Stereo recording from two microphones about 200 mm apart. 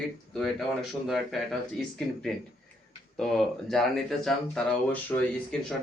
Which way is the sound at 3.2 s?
Centre (ahead or behind).